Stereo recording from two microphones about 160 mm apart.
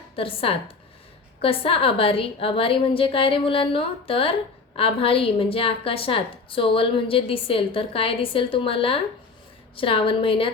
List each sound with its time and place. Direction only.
0.2 s a woman's voice: 35° left (ahead or behind)